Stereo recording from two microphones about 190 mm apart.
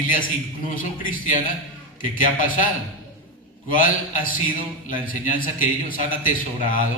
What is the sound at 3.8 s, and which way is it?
A man's voice, 45° left (ahead or behind).